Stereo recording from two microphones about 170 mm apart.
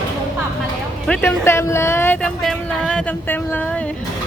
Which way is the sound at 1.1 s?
15° left (ahead or behind).